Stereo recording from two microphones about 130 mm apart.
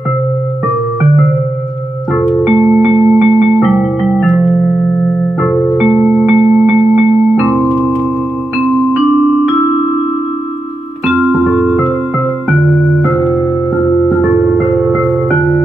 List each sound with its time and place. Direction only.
2.1 s music: 5° right (ahead or behind)
5.8 s music: 5° right (ahead or behind)
11.4 s music: 5° right (ahead or behind)
14.4 s music: centre (ahead or behind)